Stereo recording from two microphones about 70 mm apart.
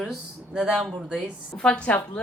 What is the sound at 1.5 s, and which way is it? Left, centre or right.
Speech, centre.